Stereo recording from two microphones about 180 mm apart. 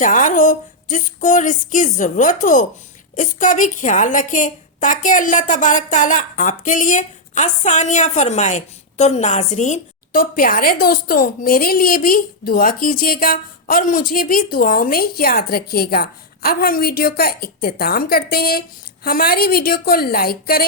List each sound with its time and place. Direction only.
0.0 s a woman's voice: 45° left (ahead or behind)